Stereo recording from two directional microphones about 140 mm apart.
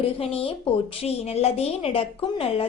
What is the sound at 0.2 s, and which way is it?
A woman's voice, 45° left (ahead or behind).